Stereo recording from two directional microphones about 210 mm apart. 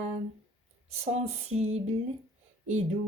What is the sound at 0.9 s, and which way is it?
Speech, 30° right (ahead or behind).